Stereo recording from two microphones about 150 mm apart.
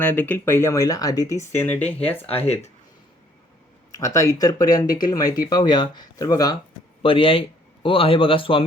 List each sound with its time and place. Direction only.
0.0 s speech: 10° left (ahead or behind)
1.5 s speech: 10° left (ahead or behind)
2.2 s speech: 40° left (ahead or behind)
4.0 s speech: 20° left (ahead or behind)
7.0 s speech: 35° left (ahead or behind)